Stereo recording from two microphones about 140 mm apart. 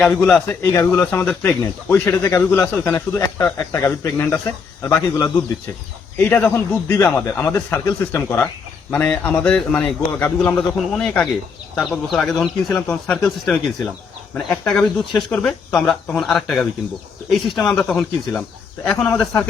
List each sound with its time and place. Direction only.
0.0 s speech: 5° left (ahead or behind)
0.4 s speech: 20° left (ahead or behind)